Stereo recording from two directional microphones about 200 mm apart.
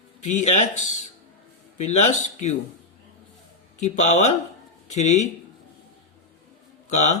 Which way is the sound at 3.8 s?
35° left (ahead or behind).